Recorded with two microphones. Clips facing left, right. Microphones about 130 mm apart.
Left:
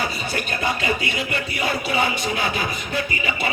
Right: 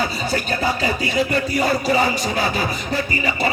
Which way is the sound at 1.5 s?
40° right (ahead or behind).